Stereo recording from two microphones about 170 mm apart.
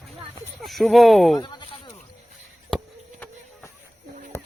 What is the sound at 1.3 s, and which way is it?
Speech, 25° left (ahead or behind).